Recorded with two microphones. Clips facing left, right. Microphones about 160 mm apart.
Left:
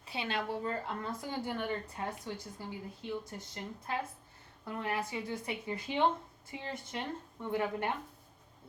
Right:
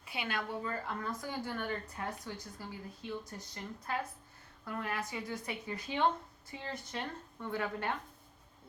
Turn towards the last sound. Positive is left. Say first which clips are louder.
# left 3 dB
turn(degrees=20)  # may be behind; listen again after turning